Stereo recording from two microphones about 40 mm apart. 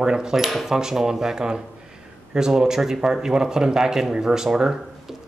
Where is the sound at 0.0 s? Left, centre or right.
Centre.